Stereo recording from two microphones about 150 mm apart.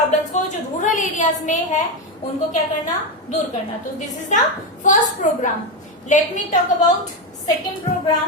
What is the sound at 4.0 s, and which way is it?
A woman's voice, 55° left (ahead or behind).